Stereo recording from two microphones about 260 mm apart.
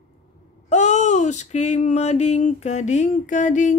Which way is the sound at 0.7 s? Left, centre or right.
Left.